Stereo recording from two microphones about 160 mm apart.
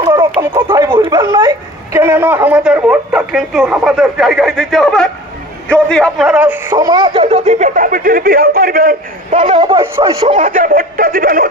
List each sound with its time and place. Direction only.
0.1 s a sound: 30° right (ahead or behind)
0.9 s a man's voice: 25° right (ahead or behind); by 8.9 s 65° right (ahead or behind)
9.3 s speech: 45° right (ahead or behind)
9.6 s a man's voice: 30° right (ahead or behind)
10.4 s speech: 55° right (ahead or behind)